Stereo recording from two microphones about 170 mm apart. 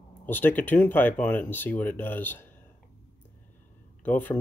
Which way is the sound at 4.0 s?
10° left (ahead or behind).